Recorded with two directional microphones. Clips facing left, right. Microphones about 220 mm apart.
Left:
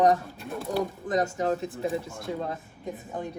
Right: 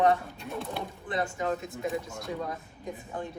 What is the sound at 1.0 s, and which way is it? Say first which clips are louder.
Speech: left 1 dB; 40° left (ahead or behind).